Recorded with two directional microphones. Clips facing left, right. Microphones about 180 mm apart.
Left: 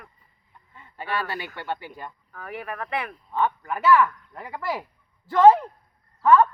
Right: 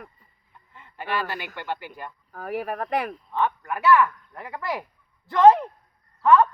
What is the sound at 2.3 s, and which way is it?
Speech, 40° right (ahead or behind).